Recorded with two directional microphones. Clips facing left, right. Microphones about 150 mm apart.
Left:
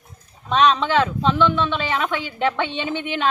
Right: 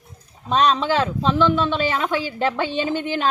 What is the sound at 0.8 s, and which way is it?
A woman's voice, 35° right (ahead or behind).